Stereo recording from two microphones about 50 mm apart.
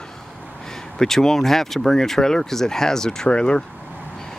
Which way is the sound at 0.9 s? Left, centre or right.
Centre.